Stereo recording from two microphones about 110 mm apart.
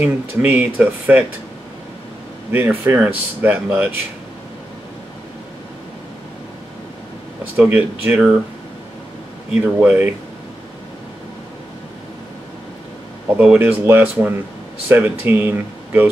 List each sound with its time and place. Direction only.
0.0 s speech: 15° right (ahead or behind)
2.5 s speech: 20° right (ahead or behind)
7.5 s speech: 15° right (ahead or behind)
9.5 s speech: 10° right (ahead or behind)
13.4 s speech: 15° right (ahead or behind)